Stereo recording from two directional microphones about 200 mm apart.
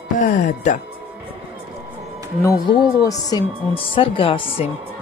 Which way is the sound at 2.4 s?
15° left (ahead or behind).